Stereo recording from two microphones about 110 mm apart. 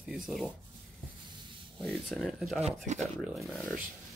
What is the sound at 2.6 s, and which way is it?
Speech, 90° right.